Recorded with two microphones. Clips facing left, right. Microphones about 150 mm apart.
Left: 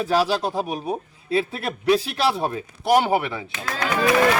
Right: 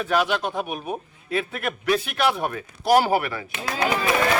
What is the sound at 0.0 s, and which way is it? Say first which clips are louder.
A man's voice: left 2 dB; 35° left (ahead or behind).